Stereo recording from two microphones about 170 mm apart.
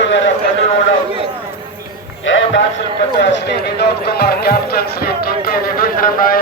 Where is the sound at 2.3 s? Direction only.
90° left.